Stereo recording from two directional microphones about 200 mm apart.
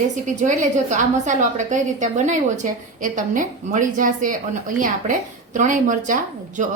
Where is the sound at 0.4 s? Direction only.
35° right (ahead or behind).